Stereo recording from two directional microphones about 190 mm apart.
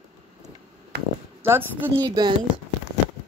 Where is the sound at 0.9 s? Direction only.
55° right (ahead or behind).